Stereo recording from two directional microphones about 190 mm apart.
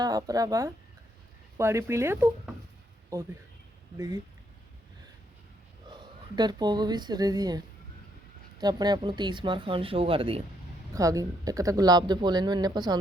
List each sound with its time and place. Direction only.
0.0 s speech: 20° right (ahead or behind)
3.9 s speech: 20° right (ahead or behind)
5.9 s a woman's voice: 25° right (ahead or behind)
10.9 s speech: 20° right (ahead or behind)